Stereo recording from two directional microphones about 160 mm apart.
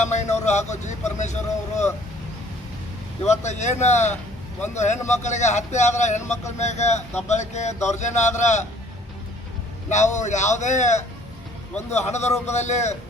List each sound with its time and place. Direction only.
0.0 s speech: 45° left (ahead or behind)
3.2 s speech: 45° left (ahead or behind)
9.9 s speech: 45° left (ahead or behind)